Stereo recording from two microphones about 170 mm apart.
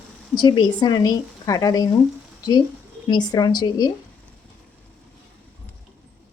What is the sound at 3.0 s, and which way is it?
Speech, 25° left (ahead or behind).